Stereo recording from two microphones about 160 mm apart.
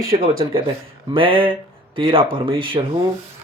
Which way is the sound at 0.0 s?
65° right (ahead or behind).